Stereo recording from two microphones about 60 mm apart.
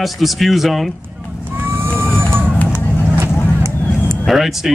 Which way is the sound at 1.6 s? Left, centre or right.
Right.